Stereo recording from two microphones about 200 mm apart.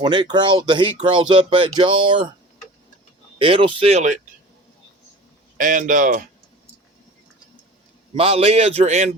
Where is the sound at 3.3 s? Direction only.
25° right (ahead or behind).